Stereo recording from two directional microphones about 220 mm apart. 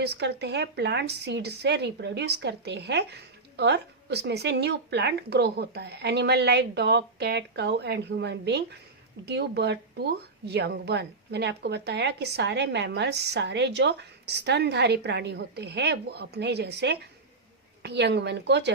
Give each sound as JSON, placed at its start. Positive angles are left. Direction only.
{"t": 0.0, "sound": "speech", "side_deg": -50}